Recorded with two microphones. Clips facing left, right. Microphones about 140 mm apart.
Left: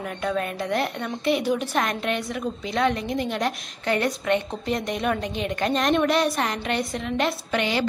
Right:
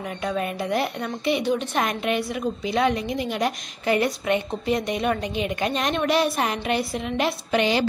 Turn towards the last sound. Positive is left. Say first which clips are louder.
# right 3 dB
turn(degrees=-20)  # may be behind; listen again after turning